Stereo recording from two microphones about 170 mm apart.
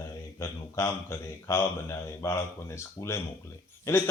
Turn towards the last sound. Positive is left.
turn(degrees=15)  # may be behind; listen again after turning